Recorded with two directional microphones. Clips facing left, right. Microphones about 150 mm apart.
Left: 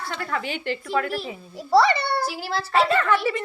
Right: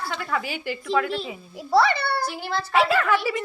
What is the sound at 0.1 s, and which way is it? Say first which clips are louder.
A child's voice: left 2 dB; 5° right (ahead or behind).